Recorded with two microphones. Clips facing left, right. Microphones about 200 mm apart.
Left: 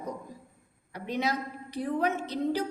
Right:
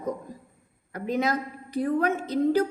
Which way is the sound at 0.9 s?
50° right (ahead or behind).